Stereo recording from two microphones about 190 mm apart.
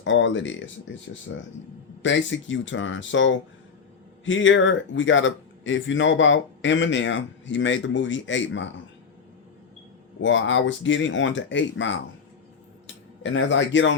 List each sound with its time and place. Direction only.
0.0 s speech: 80° left
1.3 s speech: 90° left
2.0 s speech: 75° left (ahead or behind)
10.2 s speech: 80° left
13.2 s speech: 75° left (ahead or behind)